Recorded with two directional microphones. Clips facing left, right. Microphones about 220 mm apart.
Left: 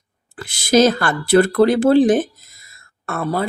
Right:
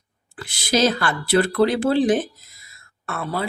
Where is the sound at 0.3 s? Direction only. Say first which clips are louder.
Left 7 dB; 50° left (ahead or behind).